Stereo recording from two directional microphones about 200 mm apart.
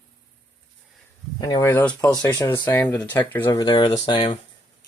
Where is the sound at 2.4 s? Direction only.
20° left (ahead or behind).